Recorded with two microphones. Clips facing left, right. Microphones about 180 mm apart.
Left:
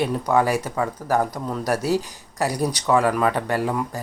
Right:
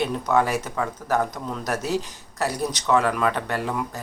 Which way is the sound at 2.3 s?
15° left (ahead or behind).